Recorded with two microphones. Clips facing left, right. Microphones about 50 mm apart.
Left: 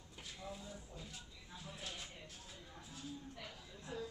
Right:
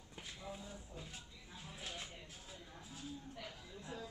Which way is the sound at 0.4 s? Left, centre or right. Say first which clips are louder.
Even; centre.